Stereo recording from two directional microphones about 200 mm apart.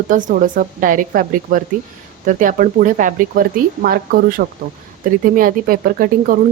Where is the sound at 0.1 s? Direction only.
40° right (ahead or behind).